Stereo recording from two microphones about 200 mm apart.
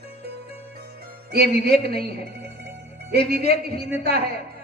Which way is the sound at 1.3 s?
50° right (ahead or behind).